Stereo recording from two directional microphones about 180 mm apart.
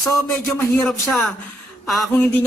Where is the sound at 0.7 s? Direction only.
5° left (ahead or behind).